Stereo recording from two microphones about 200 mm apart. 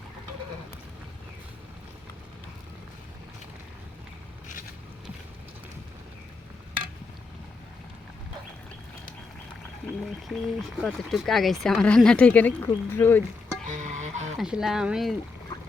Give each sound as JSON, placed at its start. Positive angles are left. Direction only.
{"t": 10.2, "sound": "speech", "side_deg": 0}
{"t": 13.7, "sound": "music", "side_deg": -35}
{"t": 14.3, "sound": "speech", "side_deg": 0}